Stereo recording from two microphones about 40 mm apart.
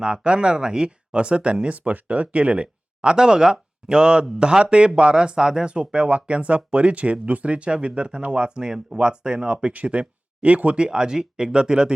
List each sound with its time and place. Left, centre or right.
0.0 s speech: right
10.8 s speech: right